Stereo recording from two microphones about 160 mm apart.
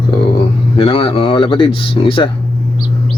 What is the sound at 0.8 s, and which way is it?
A man's voice, 35° left (ahead or behind).